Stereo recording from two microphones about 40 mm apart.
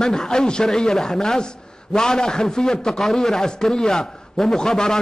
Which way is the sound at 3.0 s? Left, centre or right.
Centre.